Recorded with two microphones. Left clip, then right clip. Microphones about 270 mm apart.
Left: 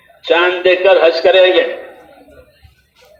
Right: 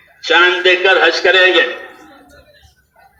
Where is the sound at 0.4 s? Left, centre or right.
Right.